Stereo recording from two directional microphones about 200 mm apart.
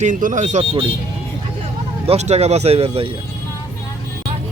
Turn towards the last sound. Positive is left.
turn(degrees=-30)  # may be behind; listen again after turning